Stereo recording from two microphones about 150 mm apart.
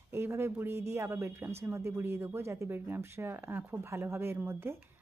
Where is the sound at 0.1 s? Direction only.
15° right (ahead or behind).